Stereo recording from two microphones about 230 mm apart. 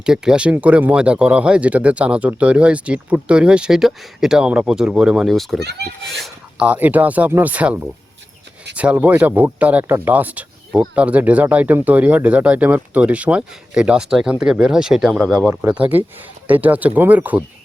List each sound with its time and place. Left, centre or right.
0.0 s speech: centre
5.5 s a child's voice: right
6.1 s speech: centre
15.6 s speech: centre
16.5 s speech: centre